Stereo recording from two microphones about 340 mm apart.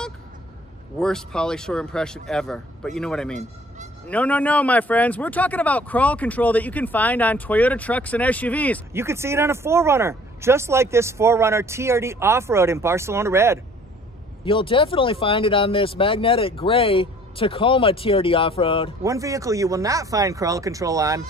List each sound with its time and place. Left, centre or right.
0.9 s speech: centre
8.9 s speech: centre
14.4 s speech: centre
19.0 s speech: centre